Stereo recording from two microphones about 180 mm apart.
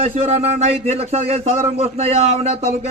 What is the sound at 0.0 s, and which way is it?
Speech, 35° right (ahead or behind).